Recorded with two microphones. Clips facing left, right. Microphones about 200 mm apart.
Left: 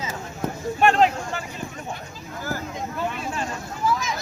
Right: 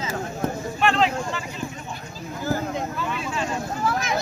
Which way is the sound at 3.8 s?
65° right (ahead or behind).